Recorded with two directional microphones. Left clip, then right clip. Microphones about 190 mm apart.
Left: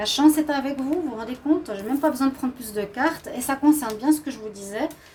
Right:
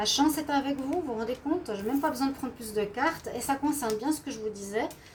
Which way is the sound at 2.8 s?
40° left (ahead or behind).